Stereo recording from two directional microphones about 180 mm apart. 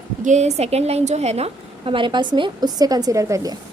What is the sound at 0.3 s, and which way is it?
A woman's voice, 40° right (ahead or behind).